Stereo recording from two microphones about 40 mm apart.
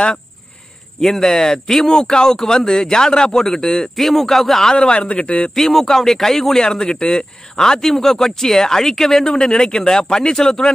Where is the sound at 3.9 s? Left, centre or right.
Centre.